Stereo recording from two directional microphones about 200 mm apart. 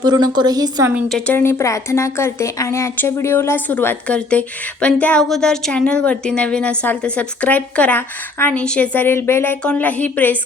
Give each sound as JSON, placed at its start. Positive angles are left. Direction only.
{"t": 0.0, "sound": "a woman's voice", "side_deg": -20}
{"t": 0.9, "sound": "a woman's voice", "side_deg": 0}